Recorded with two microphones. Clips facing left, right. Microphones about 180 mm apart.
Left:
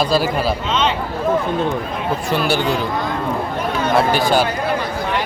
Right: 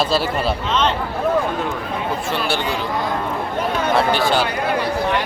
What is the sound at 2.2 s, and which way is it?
Speech, 40° left (ahead or behind).